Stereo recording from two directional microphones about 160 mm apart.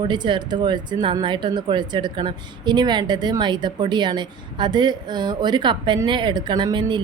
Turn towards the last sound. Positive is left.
turn(degrees=-30)  # may be behind; listen again after turning